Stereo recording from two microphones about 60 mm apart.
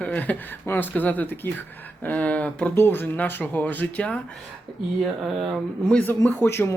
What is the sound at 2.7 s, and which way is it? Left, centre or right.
Speech, left.